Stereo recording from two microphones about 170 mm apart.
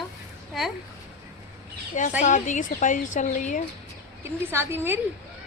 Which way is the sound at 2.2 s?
45° left (ahead or behind).